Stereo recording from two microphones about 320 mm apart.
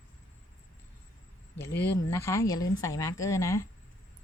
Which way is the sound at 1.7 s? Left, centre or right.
Left.